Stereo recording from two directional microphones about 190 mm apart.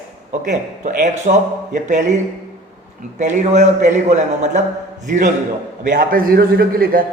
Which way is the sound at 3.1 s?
40° right (ahead or behind).